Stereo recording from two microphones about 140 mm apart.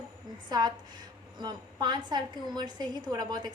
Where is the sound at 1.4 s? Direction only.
30° right (ahead or behind).